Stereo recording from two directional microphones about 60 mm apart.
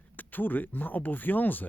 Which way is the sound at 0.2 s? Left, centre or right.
Left.